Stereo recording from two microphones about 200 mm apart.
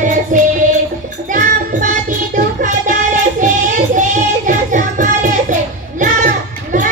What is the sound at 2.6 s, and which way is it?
Child singing, 40° right (ahead or behind).